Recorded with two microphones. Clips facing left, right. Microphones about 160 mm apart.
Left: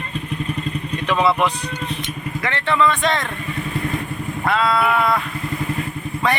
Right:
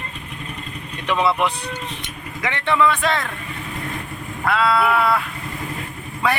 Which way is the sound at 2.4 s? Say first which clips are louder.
Even; 15° right (ahead or behind).